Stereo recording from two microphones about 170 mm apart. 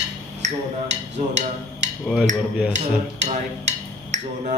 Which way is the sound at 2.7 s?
45° right (ahead or behind).